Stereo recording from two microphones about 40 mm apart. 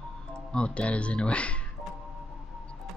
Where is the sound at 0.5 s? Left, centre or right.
Left.